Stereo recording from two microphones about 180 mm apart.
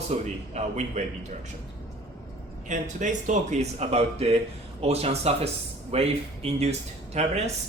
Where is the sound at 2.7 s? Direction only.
45° right (ahead or behind).